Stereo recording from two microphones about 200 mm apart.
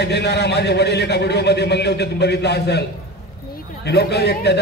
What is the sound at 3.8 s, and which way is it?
Speech, 55° left (ahead or behind).